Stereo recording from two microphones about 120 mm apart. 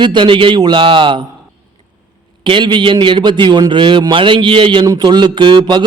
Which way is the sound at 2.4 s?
40° right (ahead or behind).